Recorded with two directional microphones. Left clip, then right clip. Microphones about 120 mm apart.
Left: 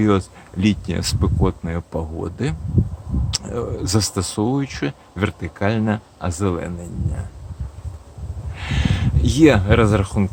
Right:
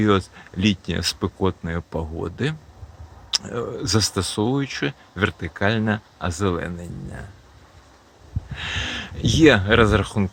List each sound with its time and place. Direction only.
0.0 s speech: 10° right (ahead or behind)
8.5 s speech: 10° right (ahead or behind)